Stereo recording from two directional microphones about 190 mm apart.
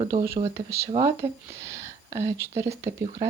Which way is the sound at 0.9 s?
25° right (ahead or behind).